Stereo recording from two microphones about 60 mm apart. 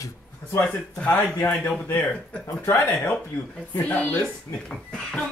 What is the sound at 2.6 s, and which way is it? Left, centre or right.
Speech, left.